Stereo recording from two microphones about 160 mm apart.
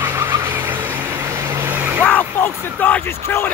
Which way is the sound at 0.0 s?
15° right (ahead or behind).